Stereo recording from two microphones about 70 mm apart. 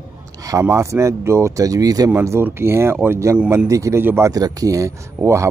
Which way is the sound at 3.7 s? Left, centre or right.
Right.